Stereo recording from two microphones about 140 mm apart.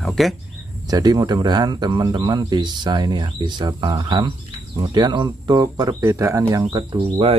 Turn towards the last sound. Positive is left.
turn(degrees=-35)  # may be behind; listen again after turning